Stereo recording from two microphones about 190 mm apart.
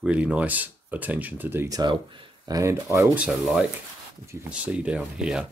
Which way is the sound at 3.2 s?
5° right (ahead or behind).